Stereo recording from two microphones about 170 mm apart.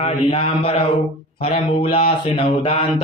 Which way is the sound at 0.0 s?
35° left (ahead or behind).